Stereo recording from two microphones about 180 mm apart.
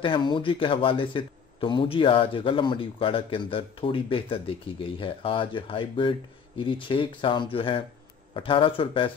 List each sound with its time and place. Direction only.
0.0 s speech: 25° left (ahead or behind)